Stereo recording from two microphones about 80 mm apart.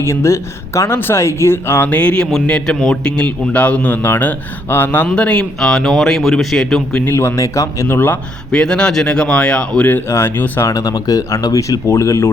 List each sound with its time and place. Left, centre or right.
0.0 s speech: left
1.9 s a man's voice: centre
5.1 s a man's voice: centre
5.5 s a man's voice: centre
7.0 s speech: left
7.9 s speech: left
8.5 s a man's voice: centre
10.1 s speech: left
10.7 s speech: left
11.9 s speech: left